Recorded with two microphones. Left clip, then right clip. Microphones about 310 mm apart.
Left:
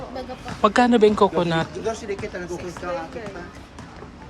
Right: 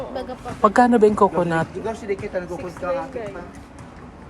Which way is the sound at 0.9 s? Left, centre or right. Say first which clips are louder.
Right 1 dB; centre.